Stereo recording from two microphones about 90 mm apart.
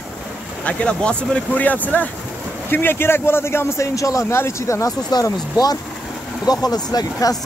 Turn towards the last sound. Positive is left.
turn(degrees=45)  # may be behind; listen again after turning